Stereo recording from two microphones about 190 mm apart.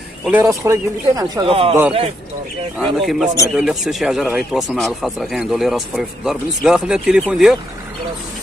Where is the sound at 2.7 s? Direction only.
Centre (ahead or behind).